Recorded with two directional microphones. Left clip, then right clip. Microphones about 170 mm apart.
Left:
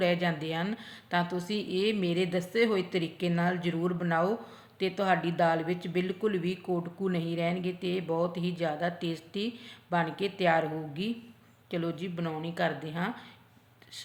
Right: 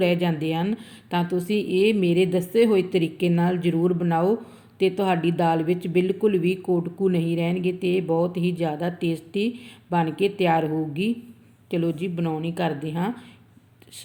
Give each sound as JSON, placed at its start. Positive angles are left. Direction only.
{"t": 0.0, "sound": "a woman's voice", "side_deg": -15}